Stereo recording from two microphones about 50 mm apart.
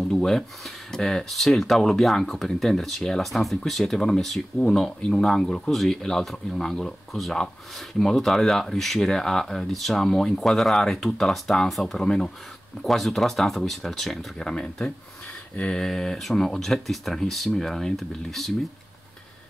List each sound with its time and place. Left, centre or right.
0.0 s speech: centre
14.4 s speech: centre
15.5 s a sound: left
15.8 s speech: centre